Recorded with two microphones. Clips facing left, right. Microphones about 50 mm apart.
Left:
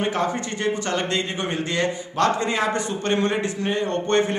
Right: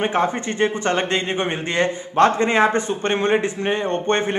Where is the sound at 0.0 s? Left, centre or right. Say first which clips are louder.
Right 3 dB; right.